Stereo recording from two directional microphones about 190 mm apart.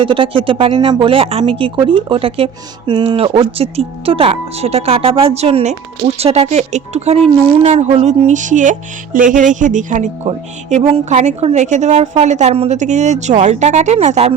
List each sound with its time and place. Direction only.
0.0 s a woman's voice: 30° right (ahead or behind)